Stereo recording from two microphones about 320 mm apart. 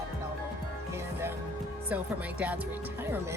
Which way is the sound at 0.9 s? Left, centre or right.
Centre.